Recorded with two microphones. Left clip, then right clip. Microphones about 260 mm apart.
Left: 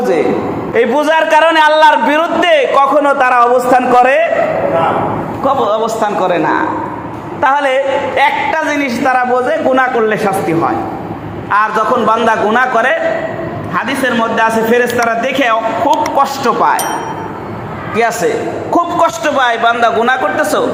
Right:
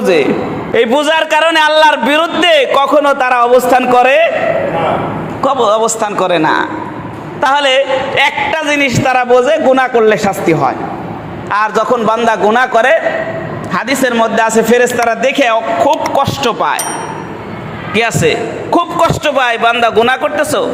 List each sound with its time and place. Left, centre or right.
0.7 s a man's voice: right
5.4 s a man's voice: right
18.7 s a man's voice: right